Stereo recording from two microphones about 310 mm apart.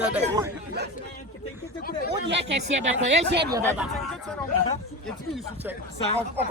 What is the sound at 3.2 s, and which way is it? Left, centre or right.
Speech, right.